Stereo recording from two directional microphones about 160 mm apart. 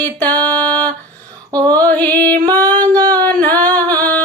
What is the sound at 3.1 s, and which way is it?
Singing, 10° left (ahead or behind).